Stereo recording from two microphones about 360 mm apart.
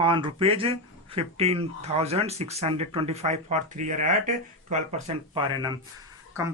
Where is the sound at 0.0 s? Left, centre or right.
Centre.